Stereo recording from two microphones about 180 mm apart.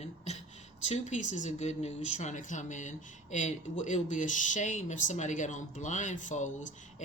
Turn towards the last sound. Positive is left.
turn(degrees=45)  # may be behind; listen again after turning